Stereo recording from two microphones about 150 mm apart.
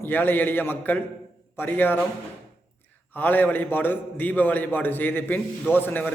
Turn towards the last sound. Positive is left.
turn(degrees=15)  # may be behind; listen again after turning